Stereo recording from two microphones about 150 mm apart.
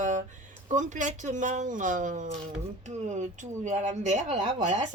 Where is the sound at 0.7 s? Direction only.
55° right (ahead or behind).